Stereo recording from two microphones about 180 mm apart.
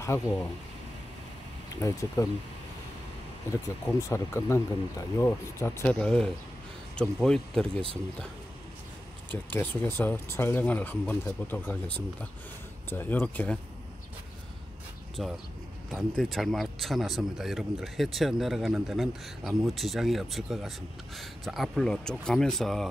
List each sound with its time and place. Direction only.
0.0 s speech: 15° left (ahead or behind)
1.7 s speech: 15° left (ahead or behind)
3.6 s speech: 15° left (ahead or behind)
9.5 s speech: 10° left (ahead or behind)
12.9 s speech: 10° left (ahead or behind)
15.2 s speech: centre (ahead or behind)